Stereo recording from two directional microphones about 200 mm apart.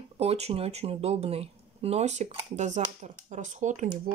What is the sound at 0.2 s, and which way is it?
Speech, 30° right (ahead or behind).